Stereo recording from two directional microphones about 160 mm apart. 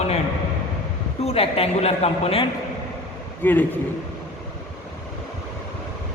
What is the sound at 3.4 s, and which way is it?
Speech, 10° left (ahead or behind).